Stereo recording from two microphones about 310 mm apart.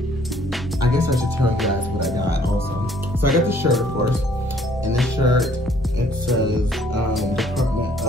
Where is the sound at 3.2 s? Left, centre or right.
Centre.